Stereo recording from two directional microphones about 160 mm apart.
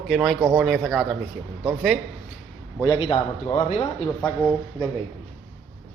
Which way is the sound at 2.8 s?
30° left (ahead or behind).